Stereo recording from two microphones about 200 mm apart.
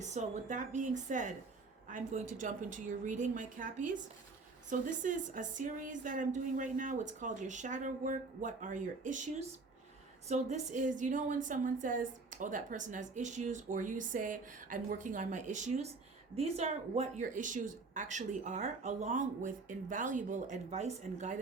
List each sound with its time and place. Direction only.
0.0 s a woman's voice: 35° right (ahead or behind)